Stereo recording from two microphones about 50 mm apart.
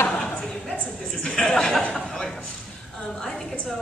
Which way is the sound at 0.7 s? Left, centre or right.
Left.